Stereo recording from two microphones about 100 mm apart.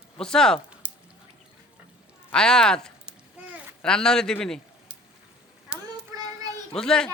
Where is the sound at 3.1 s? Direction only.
15° right (ahead or behind).